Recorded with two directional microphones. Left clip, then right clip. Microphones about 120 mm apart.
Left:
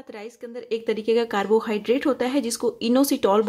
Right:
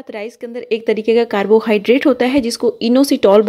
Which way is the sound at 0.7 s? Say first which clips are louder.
Right 8 dB; 40° right (ahead or behind).